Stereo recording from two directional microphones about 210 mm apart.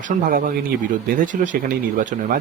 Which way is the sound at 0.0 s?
40° right (ahead or behind).